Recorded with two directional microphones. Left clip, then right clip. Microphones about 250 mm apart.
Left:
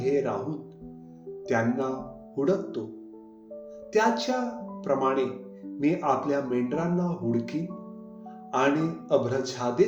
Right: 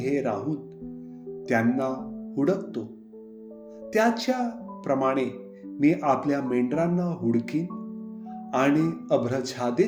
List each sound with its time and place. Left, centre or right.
0.0 s speech: right
3.9 s speech: right